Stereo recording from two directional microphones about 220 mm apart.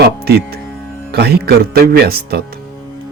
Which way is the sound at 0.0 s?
45° right (ahead or behind).